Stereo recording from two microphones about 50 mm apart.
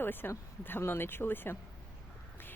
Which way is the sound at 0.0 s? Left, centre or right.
Left.